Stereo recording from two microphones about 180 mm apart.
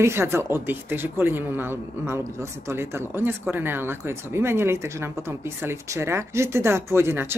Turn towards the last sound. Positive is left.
turn(degrees=-15)  # may be behind; listen again after turning